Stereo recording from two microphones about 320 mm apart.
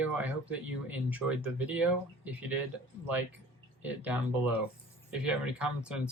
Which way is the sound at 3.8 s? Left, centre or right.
Centre.